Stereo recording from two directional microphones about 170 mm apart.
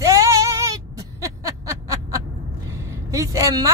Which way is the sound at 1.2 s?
20° right (ahead or behind).